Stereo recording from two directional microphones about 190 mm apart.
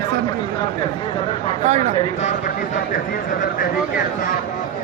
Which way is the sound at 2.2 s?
35° left (ahead or behind).